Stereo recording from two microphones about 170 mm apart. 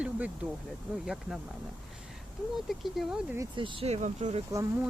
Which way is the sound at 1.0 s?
Centre (ahead or behind).